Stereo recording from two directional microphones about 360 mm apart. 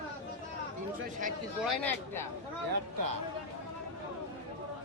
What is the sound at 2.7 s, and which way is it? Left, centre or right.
Speech, right.